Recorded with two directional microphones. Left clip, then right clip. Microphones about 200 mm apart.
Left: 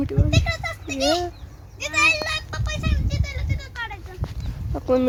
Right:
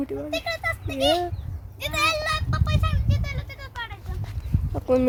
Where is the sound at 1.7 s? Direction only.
55° right (ahead or behind); by 4.0 s 25° right (ahead or behind).